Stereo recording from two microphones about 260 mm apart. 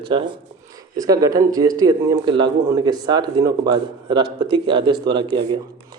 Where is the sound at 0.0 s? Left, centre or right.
Centre.